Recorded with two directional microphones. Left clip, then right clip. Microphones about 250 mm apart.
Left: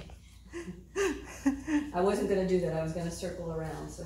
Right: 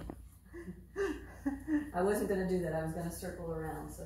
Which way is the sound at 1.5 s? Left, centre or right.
Left.